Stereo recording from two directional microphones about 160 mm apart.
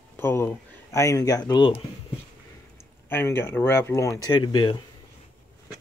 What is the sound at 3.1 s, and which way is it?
Speech, 15° left (ahead or behind).